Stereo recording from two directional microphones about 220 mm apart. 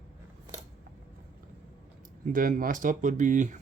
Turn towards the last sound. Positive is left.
turn(degrees=-35)  # may be behind; listen again after turning